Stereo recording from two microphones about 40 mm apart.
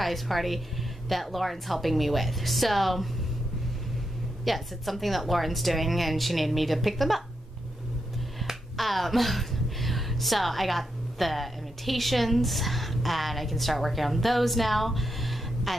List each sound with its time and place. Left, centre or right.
0.0 s a woman's voice: centre
4.5 s a woman's voice: centre
8.7 s a woman's voice: centre